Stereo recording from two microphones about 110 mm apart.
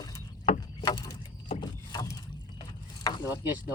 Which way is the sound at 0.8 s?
40° left (ahead or behind).